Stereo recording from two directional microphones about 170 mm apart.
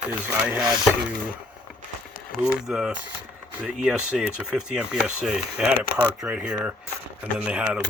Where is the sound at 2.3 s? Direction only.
5° right (ahead or behind).